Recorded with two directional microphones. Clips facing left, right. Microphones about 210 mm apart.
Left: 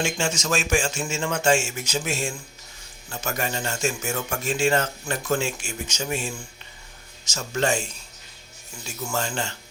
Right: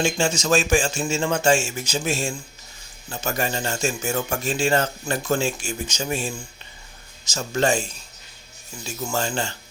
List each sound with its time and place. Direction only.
0.0 s speech: 30° right (ahead or behind)
9.0 s speech: 30° right (ahead or behind)